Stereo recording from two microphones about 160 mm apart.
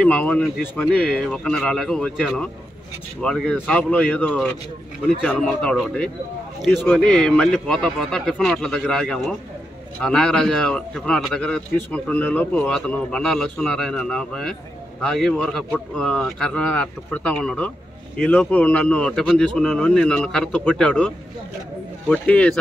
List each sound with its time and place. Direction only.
0.0 s a man's voice: 5° left (ahead or behind)
22.1 s speech: 5° left (ahead or behind)